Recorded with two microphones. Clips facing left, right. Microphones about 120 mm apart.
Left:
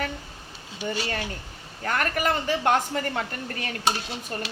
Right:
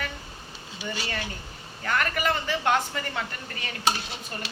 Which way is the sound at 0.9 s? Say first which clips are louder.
Left 3 dB; 40° left (ahead or behind).